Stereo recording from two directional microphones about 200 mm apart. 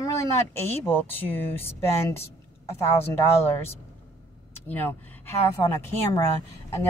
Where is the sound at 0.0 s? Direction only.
15° left (ahead or behind).